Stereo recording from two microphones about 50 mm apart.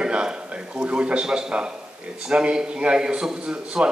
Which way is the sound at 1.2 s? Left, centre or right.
Centre.